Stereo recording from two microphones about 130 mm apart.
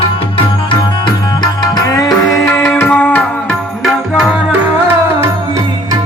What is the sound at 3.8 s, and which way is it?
Music, 5° right (ahead or behind).